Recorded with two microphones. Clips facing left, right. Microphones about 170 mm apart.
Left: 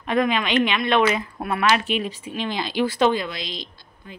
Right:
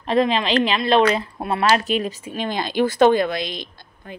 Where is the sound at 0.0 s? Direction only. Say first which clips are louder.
Right 3 dB; 30° right (ahead or behind).